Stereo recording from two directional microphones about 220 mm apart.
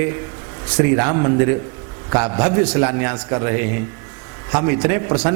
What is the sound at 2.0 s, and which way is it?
A man's voice, 20° right (ahead or behind).